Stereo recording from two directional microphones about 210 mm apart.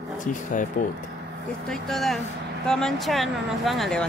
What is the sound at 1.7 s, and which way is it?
Speech, centre (ahead or behind).